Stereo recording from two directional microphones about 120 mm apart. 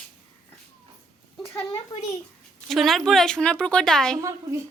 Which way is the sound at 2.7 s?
Centre (ahead or behind).